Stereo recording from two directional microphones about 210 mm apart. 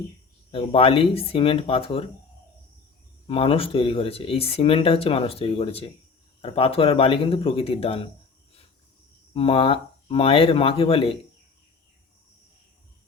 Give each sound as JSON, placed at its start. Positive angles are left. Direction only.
{"t": 0.5, "sound": "speech", "side_deg": 25}
{"t": 3.2, "sound": "speech", "side_deg": 25}
{"t": 9.3, "sound": "speech", "side_deg": 25}